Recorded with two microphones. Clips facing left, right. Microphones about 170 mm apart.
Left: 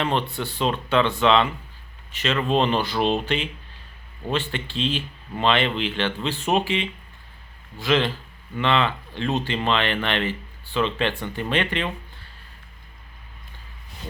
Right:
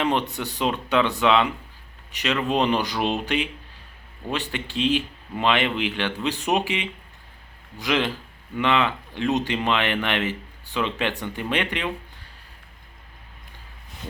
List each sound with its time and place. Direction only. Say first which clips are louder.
0.0 s speech: right 1 dB; 15° right (ahead or behind)